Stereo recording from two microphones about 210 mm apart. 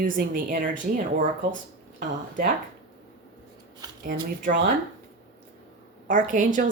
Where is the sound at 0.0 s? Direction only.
40° right (ahead or behind).